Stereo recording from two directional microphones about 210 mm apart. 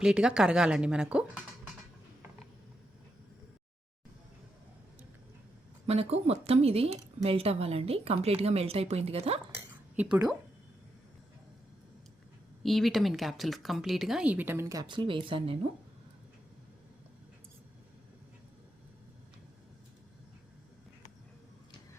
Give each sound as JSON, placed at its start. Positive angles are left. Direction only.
{"t": 0.0, "sound": "speech", "side_deg": -5}
{"t": 5.8, "sound": "speech", "side_deg": -30}
{"t": 9.6, "sound": "a sound", "side_deg": -5}
{"t": 12.6, "sound": "speech", "side_deg": 0}